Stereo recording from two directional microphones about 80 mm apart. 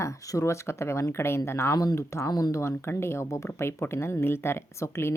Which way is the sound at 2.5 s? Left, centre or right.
Left.